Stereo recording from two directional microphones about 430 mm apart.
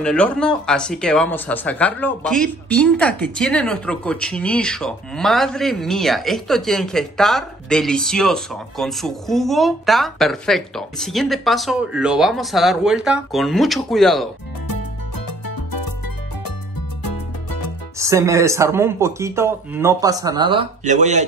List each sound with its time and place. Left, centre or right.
0.0 s speech: centre
14.7 s music: left
17.0 s music: left
17.9 s speech: centre